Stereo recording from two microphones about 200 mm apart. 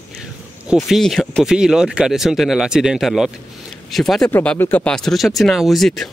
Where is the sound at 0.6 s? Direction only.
Centre (ahead or behind).